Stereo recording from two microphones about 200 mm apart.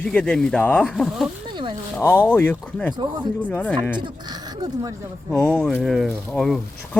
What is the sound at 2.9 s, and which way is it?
Speech, 20° right (ahead or behind).